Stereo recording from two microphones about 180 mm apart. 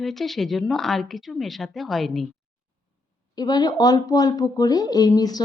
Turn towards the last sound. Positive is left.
turn(degrees=20)  # may be behind; listen again after turning